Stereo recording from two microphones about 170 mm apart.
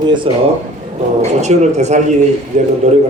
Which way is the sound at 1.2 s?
40° right (ahead or behind).